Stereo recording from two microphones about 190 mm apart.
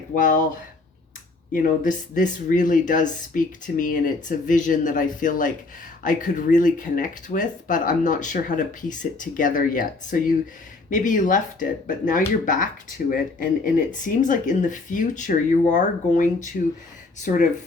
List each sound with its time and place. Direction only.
0.1 s speech: 45° left (ahead or behind)
1.5 s speech: 45° left (ahead or behind)